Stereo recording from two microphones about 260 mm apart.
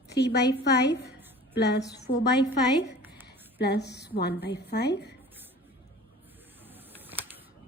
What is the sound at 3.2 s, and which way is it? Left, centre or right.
A woman's voice, left.